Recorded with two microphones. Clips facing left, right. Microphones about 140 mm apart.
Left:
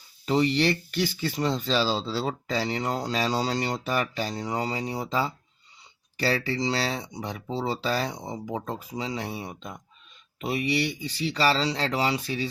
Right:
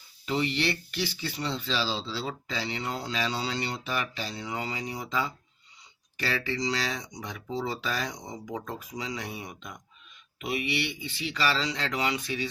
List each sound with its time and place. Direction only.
0.3 s speech: 40° left (ahead or behind)